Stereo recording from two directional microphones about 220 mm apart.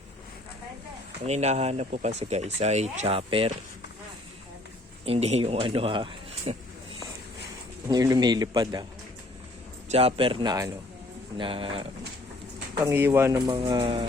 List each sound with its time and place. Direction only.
1.3 s speech: 30° right (ahead or behind)
5.0 s speech: 25° right (ahead or behind)
7.9 s speech: 15° right (ahead or behind)
9.9 s speech: 25° right (ahead or behind)
12.8 s speech: 10° right (ahead or behind)